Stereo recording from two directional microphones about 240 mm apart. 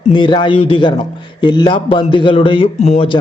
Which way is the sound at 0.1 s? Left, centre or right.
Centre.